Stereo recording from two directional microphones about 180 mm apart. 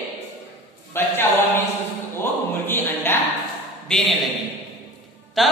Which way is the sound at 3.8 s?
Centre (ahead or behind).